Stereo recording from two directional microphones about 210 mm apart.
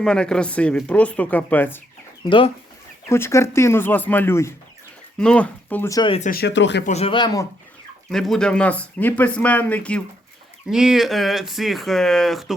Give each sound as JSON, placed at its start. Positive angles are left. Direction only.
{"t": 0.0, "sound": "speech", "side_deg": 5}
{"t": 3.1, "sound": "speech", "side_deg": 15}
{"t": 6.1, "sound": "speech", "side_deg": 35}
{"t": 6.4, "sound": "speech", "side_deg": 60}
{"t": 6.8, "sound": "speech", "side_deg": 30}
{"t": 8.1, "sound": "speech", "side_deg": 5}